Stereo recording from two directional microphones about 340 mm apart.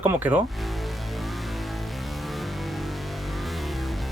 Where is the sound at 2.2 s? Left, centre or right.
Centre.